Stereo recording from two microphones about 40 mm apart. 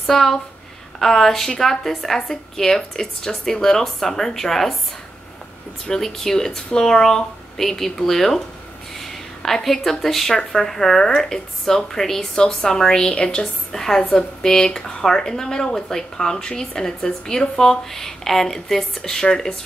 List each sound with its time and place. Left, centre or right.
0.0 s speech: centre
5.9 s a woman's voice: centre